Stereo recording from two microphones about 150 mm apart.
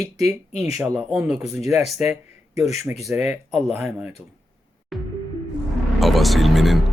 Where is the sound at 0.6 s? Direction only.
20° right (ahead or behind).